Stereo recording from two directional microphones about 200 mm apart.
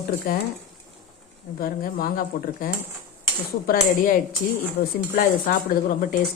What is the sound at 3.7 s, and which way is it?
Speech, 45° left (ahead or behind).